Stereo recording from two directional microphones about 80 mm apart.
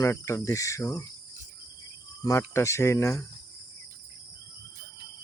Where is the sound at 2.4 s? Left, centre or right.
Left.